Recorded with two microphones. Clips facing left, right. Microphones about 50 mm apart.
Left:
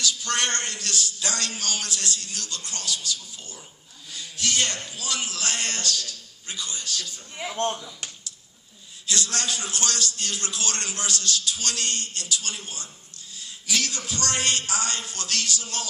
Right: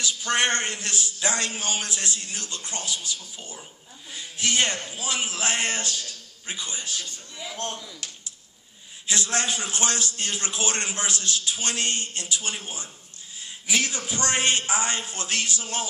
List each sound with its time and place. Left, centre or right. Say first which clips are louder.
0.0 s a man's voice: right 2 dB; centre
7.4 s speech: left 4 dB; left
9.0 s a man's voice: right 2 dB; right